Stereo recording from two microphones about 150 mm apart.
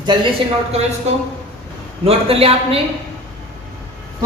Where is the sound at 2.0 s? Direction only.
40° right (ahead or behind).